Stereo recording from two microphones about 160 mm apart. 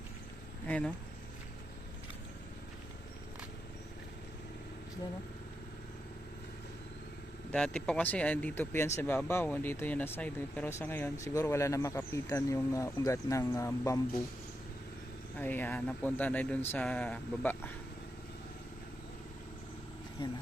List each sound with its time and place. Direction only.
0.7 s speech: 5° left (ahead or behind)
7.5 s speech: 5° left (ahead or behind)
15.4 s speech: 10° left (ahead or behind)
20.2 s speech: 30° left (ahead or behind)